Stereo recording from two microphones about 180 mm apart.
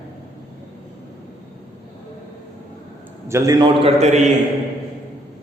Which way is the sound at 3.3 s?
20° right (ahead or behind).